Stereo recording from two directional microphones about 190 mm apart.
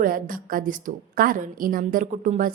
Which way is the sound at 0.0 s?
45° right (ahead or behind).